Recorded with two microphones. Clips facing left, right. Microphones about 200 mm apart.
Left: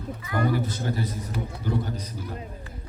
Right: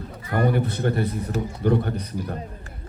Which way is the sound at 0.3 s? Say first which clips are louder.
Right 3 dB; 60° right (ahead or behind).